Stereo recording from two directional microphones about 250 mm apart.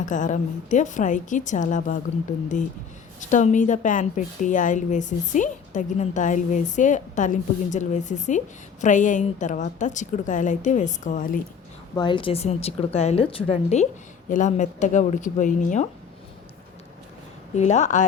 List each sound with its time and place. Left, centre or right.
0.0 s a woman's voice: left
3.2 s a woman's voice: left
11.9 s a woman's voice: centre
17.5 s a woman's voice: left